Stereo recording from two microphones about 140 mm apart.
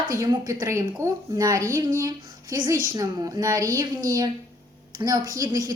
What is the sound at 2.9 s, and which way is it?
A woman's voice, 25° right (ahead or behind).